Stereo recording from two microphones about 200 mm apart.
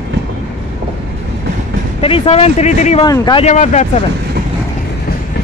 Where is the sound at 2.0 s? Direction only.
30° left (ahead or behind).